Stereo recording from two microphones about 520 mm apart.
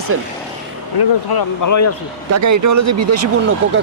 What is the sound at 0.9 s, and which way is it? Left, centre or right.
Speech, left.